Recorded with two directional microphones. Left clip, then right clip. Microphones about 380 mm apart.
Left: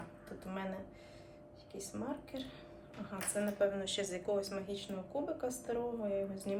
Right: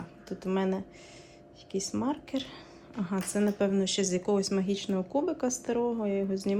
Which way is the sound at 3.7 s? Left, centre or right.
Centre.